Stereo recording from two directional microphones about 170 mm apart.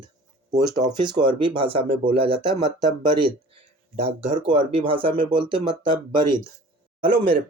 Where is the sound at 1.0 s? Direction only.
30° right (ahead or behind).